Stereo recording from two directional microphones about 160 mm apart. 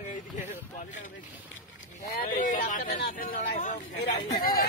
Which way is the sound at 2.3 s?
55° left (ahead or behind).